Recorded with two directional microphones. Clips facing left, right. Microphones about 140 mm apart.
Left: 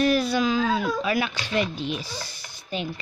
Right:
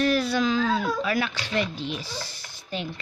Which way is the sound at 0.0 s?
15° left (ahead or behind).